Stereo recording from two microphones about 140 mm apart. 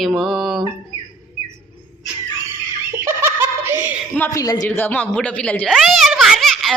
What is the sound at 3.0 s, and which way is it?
Snicker, 15° right (ahead or behind).